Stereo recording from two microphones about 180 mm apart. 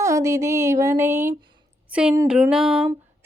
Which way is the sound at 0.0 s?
15° right (ahead or behind).